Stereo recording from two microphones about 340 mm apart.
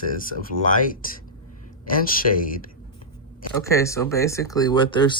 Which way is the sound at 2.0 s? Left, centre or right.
Left.